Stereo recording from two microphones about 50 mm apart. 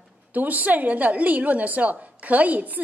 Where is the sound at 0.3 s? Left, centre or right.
Right.